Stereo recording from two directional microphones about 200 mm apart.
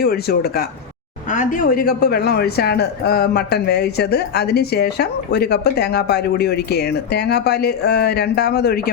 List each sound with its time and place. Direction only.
0.0 s speech: 50° left (ahead or behind)